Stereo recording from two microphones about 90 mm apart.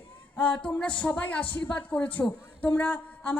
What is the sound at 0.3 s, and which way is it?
A woman's voice, 20° left (ahead or behind).